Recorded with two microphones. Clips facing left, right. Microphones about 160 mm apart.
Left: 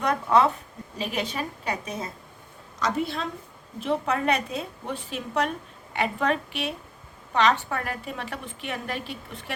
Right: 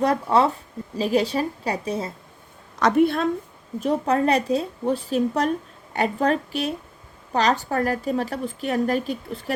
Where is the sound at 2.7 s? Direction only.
60° right (ahead or behind).